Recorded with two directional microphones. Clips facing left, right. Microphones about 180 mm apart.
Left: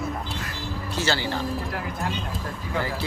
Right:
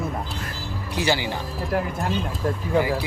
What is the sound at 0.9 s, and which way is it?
Speech, 15° right (ahead or behind).